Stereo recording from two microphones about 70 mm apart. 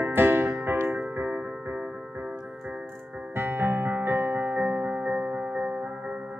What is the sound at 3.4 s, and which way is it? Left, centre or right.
Music, right.